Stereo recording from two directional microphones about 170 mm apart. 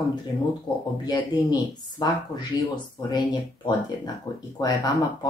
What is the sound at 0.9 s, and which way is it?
Speech, 25° left (ahead or behind).